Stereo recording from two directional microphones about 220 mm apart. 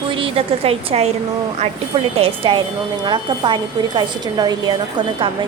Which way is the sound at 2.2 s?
25° right (ahead or behind).